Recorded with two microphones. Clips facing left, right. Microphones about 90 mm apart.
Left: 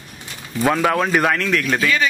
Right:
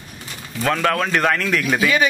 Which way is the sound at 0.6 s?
10° left (ahead or behind).